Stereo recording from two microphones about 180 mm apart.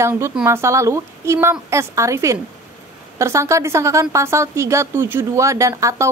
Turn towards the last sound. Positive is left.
turn(degrees=-15)  # may be behind; listen again after turning